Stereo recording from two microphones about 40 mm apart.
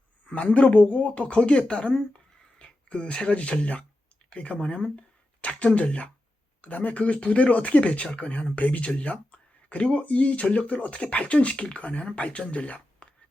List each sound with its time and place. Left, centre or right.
0.3 s speech: left